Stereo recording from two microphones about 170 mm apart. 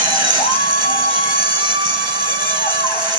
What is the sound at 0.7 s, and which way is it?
Music, 60° left (ahead or behind).